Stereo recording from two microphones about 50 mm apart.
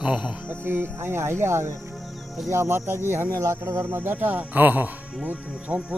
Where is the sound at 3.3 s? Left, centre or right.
Right.